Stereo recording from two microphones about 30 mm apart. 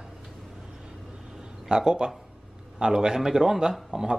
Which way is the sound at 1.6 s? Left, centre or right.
Right.